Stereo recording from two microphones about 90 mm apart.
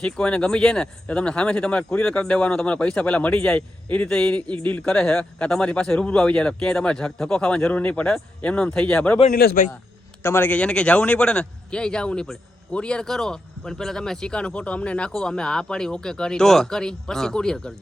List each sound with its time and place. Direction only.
0.0 s a man's voice: 10° left (ahead or behind)
10.2 s a man's voice: 25° left (ahead or behind)
10.5 s a man's voice: 10° left (ahead or behind)